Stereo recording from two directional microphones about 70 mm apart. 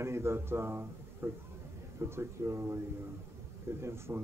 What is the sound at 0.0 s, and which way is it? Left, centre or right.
A man's voice, right.